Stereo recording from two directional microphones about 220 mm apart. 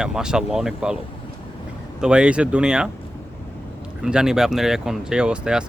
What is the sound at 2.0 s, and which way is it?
Speech, 5° right (ahead or behind).